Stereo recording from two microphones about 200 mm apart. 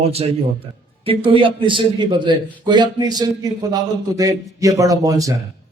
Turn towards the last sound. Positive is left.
turn(degrees=-15)  # may be behind; listen again after turning